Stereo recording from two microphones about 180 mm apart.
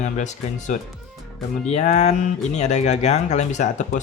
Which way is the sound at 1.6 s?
40° left (ahead or behind).